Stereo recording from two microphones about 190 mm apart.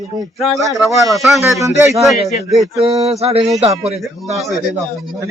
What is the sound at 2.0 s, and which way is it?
Speech, centre (ahead or behind).